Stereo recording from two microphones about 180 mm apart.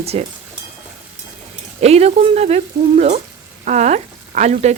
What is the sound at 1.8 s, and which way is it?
Speech, 35° right (ahead or behind).